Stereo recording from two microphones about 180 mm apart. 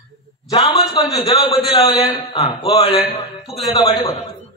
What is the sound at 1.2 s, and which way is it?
A man's voice, 20° left (ahead or behind).